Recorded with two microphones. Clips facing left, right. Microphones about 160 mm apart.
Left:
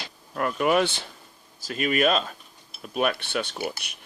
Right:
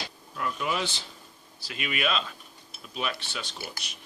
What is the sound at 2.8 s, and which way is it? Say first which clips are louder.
Speech: left 8 dB; 55° left (ahead or behind).